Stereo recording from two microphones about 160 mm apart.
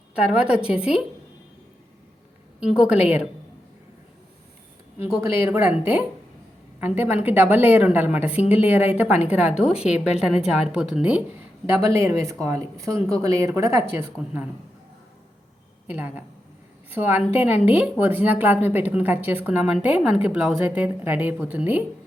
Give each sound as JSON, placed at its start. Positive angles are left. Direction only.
{"t": 0.2, "sound": "a woman's voice", "side_deg": -5}
{"t": 2.6, "sound": "a woman's voice", "side_deg": -5}
{"t": 4.9, "sound": "a woman's voice", "side_deg": -15}
{"t": 15.9, "sound": "speech", "side_deg": -10}